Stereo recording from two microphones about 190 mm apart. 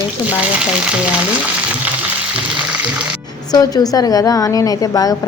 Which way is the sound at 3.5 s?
20° left (ahead or behind).